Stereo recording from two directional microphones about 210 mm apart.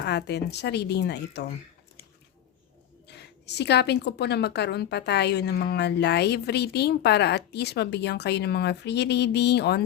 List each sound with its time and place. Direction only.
0.0 s a woman's voice: 50° left (ahead or behind)
3.1 s a woman's voice: 55° left (ahead or behind)